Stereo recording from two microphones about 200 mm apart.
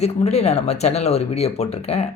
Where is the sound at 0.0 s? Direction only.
30° left (ahead or behind).